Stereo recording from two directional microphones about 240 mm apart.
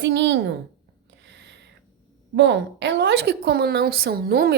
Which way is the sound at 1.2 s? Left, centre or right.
Right.